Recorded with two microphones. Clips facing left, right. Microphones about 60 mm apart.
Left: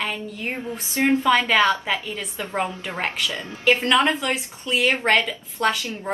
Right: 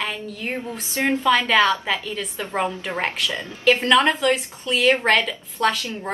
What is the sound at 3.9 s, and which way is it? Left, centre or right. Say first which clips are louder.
A woman's voice: right 3 dB; centre.